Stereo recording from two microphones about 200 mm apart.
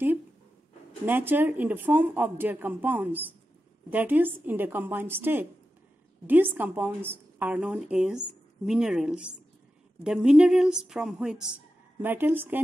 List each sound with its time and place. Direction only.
1.0 s a woman's voice: 10° right (ahead or behind)